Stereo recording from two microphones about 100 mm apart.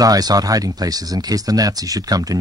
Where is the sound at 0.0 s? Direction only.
40° right (ahead or behind).